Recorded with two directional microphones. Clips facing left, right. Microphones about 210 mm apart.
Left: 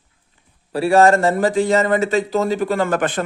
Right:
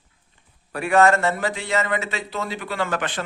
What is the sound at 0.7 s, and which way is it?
Speech, 30° left (ahead or behind).